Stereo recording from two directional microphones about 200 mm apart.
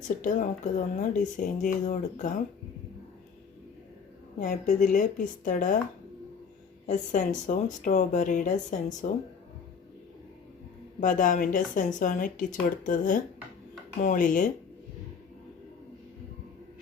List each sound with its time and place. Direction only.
0.2 s speech: 40° left (ahead or behind)
4.4 s speech: 40° left (ahead or behind)
6.8 s speech: 35° left (ahead or behind)
11.0 s speech: 40° left (ahead or behind)